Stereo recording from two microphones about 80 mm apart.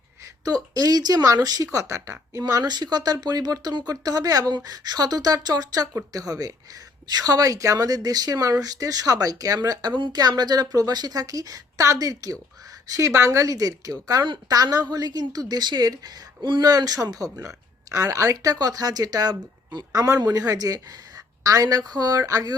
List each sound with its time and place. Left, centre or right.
0.4 s speech: right
2.4 s a woman's voice: right